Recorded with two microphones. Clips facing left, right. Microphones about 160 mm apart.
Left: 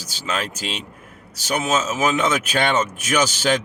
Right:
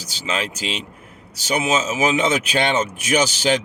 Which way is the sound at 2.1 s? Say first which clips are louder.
Right 1 dB; 50° left (ahead or behind).